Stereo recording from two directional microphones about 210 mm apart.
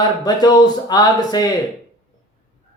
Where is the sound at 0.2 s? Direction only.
20° left (ahead or behind).